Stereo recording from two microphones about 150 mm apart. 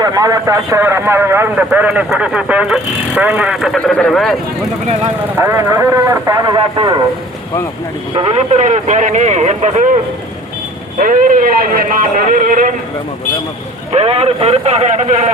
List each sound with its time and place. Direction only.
0.0 s speech: 25° right (ahead or behind); by 4.4 s 5° left (ahead or behind)
5.4 s a man's voice: 15° right (ahead or behind)
8.1 s a man's voice: 40° right (ahead or behind)
10.9 s speech: 65° right (ahead or behind)
13.9 s a man's voice: 45° right (ahead or behind)